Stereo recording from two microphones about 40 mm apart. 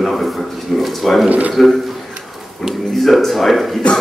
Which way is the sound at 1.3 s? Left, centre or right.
Right.